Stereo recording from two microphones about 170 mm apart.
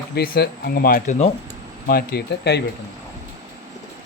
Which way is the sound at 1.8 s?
60° left (ahead or behind).